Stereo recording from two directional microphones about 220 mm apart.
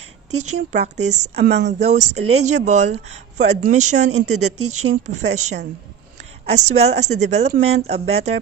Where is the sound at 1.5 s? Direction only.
50° right (ahead or behind).